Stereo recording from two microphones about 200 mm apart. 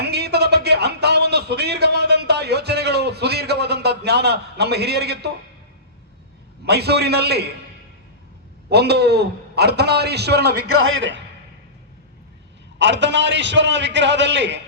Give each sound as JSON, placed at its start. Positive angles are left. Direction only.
{"t": 0.0, "sound": "a sound", "side_deg": -55}
{"t": 6.7, "sound": "a man's voice", "side_deg": -55}
{"t": 8.7, "sound": "a man's voice", "side_deg": -55}
{"t": 12.8, "sound": "a man's voice", "side_deg": -60}